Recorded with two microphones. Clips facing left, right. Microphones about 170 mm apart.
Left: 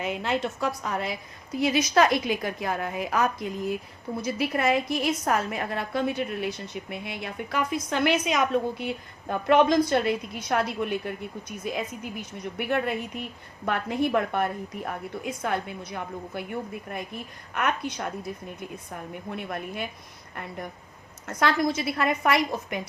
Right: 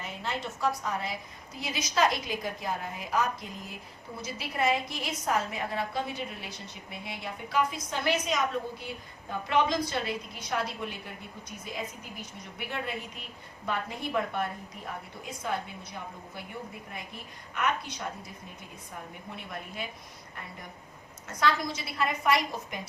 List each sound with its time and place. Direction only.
0.0 s a woman's voice: 75° left (ahead or behind); by 18.0 s 55° left (ahead or behind)
19.3 s a woman's voice: 55° left (ahead or behind)
21.2 s a woman's voice: 60° left (ahead or behind)